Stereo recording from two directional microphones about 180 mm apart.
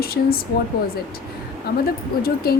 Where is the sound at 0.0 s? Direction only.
60° left (ahead or behind).